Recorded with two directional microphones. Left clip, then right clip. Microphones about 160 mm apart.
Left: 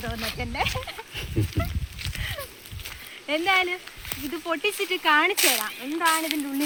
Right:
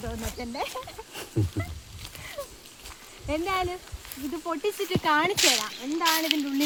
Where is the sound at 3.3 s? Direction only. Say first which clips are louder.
Left 6 dB; 40° right (ahead or behind).